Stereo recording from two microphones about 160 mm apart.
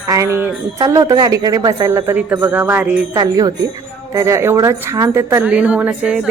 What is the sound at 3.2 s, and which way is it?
A woman's voice, 25° right (ahead or behind).